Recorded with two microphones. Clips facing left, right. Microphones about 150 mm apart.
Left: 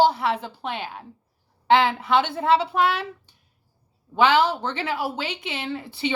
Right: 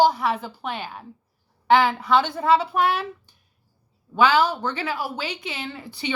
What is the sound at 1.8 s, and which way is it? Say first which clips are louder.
Speech: right 1 dB; 25° left (ahead or behind).